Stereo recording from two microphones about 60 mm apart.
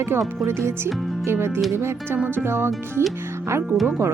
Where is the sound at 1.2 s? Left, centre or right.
Right.